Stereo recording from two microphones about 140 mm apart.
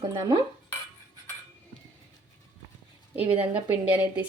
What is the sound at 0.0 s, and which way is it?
Cutlery, 25° right (ahead or behind).